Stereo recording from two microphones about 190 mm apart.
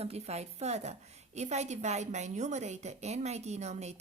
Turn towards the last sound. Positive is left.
turn(degrees=-35)  # may be behind; listen again after turning